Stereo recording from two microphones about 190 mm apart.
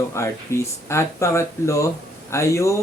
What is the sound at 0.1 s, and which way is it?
Speech, 15° left (ahead or behind).